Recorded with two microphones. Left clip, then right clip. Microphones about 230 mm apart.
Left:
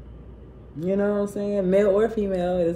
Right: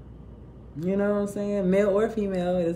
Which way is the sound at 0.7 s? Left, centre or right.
Centre.